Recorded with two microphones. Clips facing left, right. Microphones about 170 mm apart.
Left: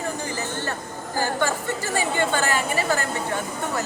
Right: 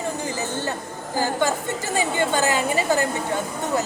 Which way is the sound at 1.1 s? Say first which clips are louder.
Right 2 dB; 15° right (ahead or behind).